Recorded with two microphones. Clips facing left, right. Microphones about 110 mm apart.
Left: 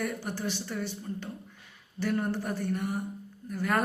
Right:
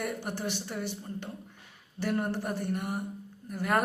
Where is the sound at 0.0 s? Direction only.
20° right (ahead or behind).